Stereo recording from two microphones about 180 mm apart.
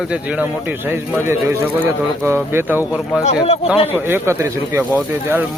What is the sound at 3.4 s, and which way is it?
Speech, 35° left (ahead or behind).